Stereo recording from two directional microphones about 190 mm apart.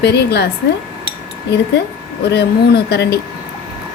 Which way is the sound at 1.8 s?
60° left (ahead or behind).